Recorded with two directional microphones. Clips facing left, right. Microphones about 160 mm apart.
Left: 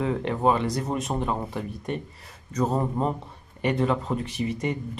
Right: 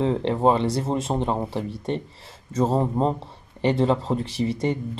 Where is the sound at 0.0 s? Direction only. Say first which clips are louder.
Right 3 dB; 30° right (ahead or behind).